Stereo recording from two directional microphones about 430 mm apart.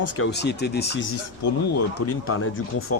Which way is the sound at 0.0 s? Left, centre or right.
Left.